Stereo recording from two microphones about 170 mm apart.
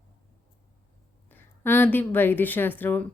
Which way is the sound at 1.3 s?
15° left (ahead or behind).